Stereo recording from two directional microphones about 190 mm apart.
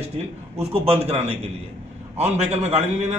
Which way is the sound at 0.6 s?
35° right (ahead or behind).